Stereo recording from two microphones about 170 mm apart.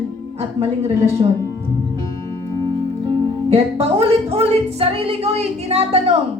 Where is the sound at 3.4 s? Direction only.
35° right (ahead or behind).